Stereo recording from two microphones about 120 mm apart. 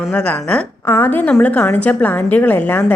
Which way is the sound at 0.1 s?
15° left (ahead or behind).